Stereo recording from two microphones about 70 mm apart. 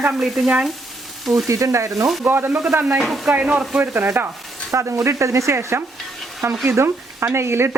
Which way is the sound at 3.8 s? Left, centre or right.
Right.